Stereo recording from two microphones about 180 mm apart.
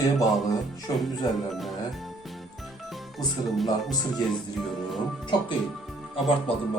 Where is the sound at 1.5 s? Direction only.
Centre (ahead or behind).